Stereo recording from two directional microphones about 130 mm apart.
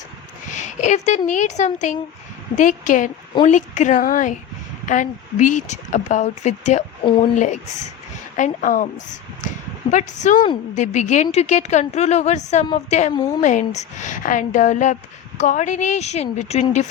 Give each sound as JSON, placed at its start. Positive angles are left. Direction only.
{"t": 0.5, "sound": "speech", "side_deg": 70}
{"t": 2.6, "sound": "a woman's voice", "side_deg": 80}
{"t": 3.4, "sound": "a woman's voice", "side_deg": 70}
{"t": 8.4, "sound": "a woman's voice", "side_deg": 80}
{"t": 13.1, "sound": "a woman's voice", "side_deg": 30}
{"t": 13.4, "sound": "a woman's voice", "side_deg": 70}